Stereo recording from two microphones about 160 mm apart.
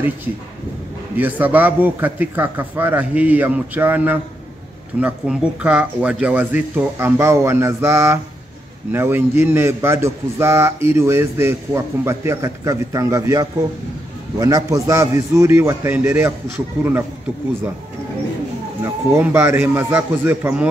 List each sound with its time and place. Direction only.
1.1 s a man's voice: 10° right (ahead or behind)
19.1 s a man's voice: 15° right (ahead or behind)